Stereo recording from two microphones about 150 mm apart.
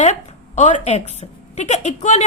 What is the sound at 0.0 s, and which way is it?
A woman's voice, 50° left (ahead or behind).